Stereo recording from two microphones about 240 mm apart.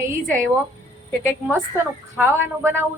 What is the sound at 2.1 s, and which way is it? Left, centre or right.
Speech, centre.